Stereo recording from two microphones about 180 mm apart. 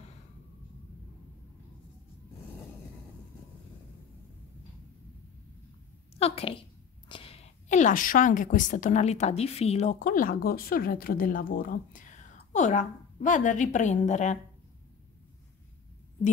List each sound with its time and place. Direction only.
6.1 s a woman's voice: 35° left (ahead or behind)
7.1 s a sound: 30° left (ahead or behind)
7.6 s a woman's voice: 45° left (ahead or behind)